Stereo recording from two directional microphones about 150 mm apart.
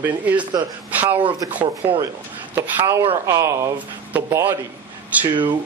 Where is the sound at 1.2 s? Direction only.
30° right (ahead or behind).